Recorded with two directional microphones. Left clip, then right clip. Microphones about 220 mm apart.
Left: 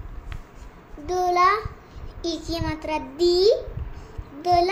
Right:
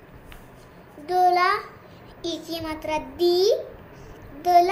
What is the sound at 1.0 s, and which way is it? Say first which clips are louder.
Child singing: even; 25° left (ahead or behind).